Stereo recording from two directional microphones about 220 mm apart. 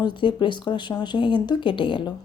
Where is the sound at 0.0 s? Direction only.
20° left (ahead or behind).